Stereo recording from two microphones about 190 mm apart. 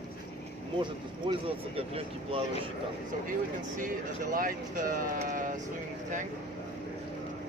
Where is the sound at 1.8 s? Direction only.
30° right (ahead or behind).